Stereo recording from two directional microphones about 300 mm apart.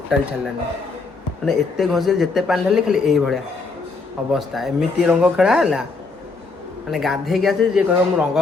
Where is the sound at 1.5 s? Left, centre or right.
Centre.